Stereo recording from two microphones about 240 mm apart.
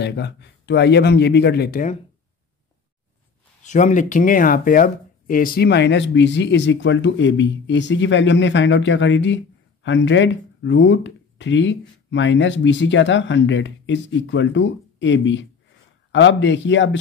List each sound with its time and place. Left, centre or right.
0.0 s speech: left
3.6 s speech: left